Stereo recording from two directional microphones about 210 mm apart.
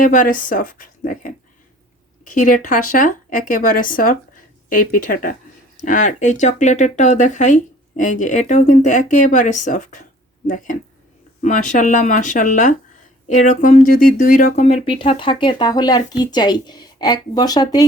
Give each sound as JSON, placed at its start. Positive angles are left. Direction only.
{"t": 0.0, "sound": "speech", "side_deg": 40}